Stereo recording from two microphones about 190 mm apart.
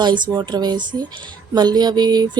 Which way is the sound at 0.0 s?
25° right (ahead or behind).